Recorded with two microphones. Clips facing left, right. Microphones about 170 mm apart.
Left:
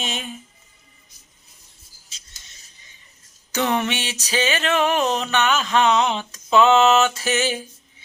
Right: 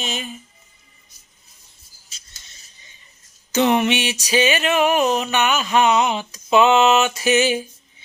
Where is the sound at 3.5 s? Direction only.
20° right (ahead or behind).